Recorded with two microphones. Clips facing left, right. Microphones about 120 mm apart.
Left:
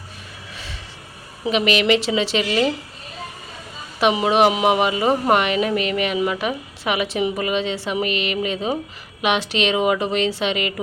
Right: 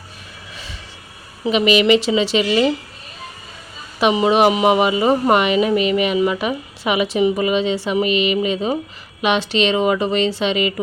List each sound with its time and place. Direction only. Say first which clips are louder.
1.5 s speech: right 4 dB; centre (ahead or behind)
4.0 s speech: right 2 dB; centre (ahead or behind)